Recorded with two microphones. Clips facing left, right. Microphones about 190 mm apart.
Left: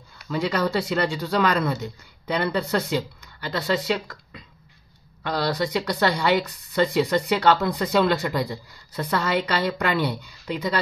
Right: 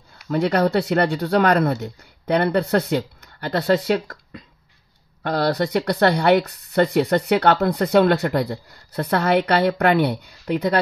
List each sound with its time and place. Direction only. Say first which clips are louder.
0.3 s speech: right 5 dB; 60° right (ahead or behind)